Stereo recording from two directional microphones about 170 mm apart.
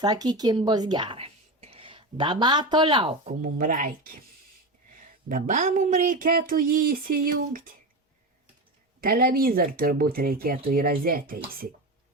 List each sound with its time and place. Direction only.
0.0 s a woman's voice: 25° right (ahead or behind)
3.4 s speech: 50° right (ahead or behind)
9.0 s speech: 60° right (ahead or behind)